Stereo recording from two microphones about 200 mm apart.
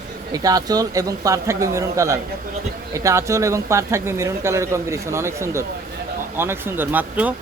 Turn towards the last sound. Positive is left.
turn(degrees=-10)  # may be behind; listen again after turning